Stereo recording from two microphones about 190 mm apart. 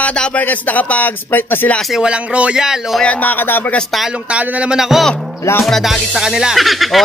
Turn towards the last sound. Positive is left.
turn(degrees=0)  # may be behind; listen again after turning